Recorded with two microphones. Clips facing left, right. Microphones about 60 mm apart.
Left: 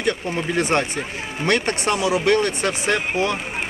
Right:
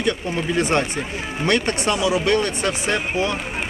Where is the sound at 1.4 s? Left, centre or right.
Left.